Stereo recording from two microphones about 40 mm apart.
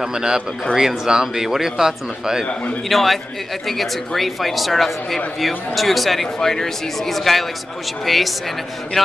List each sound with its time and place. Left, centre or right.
0.0 s speech: centre
2.9 s speech: centre